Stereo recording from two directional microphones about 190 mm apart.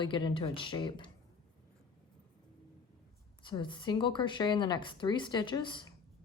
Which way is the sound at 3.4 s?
25° left (ahead or behind).